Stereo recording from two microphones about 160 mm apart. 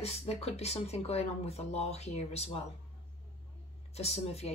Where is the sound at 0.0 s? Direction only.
40° left (ahead or behind).